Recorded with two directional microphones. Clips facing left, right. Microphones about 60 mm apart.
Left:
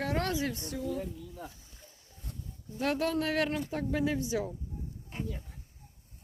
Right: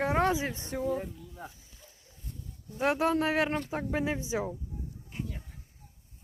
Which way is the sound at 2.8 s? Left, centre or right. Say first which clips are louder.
Right 3 dB; right.